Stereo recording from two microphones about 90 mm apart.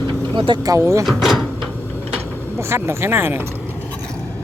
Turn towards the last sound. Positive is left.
turn(degrees=-25)  # may be behind; listen again after turning